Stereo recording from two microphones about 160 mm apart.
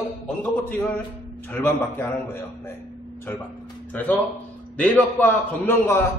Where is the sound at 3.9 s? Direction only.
10° left (ahead or behind).